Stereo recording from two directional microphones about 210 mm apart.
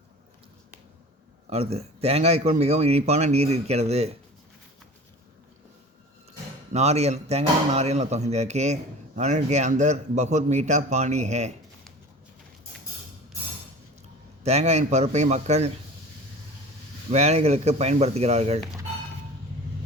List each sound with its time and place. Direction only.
1.5 s speech: 30° right (ahead or behind)
6.7 s speech: 30° right (ahead or behind)
14.4 s speech: 30° right (ahead or behind)
17.1 s speech: 30° right (ahead or behind)